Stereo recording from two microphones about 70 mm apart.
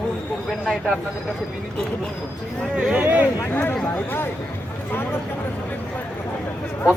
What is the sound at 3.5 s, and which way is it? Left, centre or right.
Speech, left.